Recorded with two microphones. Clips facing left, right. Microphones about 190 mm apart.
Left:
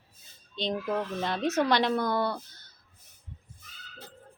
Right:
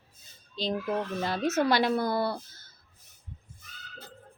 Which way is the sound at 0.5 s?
Centre (ahead or behind).